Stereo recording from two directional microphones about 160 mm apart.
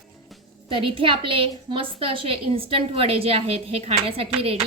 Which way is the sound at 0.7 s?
35° right (ahead or behind).